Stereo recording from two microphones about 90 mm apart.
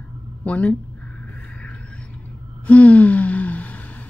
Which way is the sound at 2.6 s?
15° left (ahead or behind).